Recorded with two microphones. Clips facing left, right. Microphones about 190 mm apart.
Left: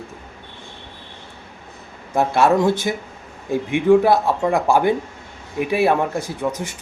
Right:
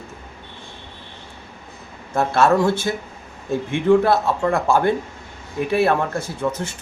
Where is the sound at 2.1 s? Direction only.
15° left (ahead or behind).